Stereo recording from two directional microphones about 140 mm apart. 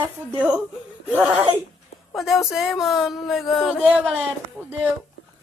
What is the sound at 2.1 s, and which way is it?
Speech, centre (ahead or behind).